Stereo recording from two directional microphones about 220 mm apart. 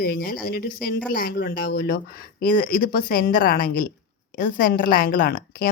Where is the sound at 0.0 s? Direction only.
40° left (ahead or behind).